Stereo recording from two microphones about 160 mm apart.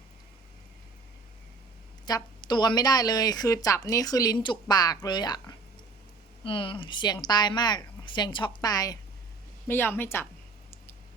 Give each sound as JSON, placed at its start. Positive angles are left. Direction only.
{"t": 2.0, "sound": "a woman's voice", "side_deg": 25}